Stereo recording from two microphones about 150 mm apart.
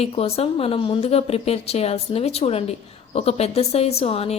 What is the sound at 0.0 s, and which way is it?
Speech, 40° left (ahead or behind).